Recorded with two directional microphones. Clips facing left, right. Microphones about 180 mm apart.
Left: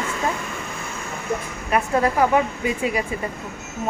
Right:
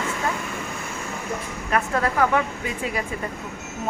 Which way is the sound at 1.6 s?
15° left (ahead or behind).